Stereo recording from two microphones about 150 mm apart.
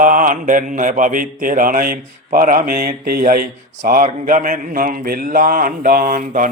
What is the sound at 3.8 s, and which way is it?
A man's voice, 60° right (ahead or behind).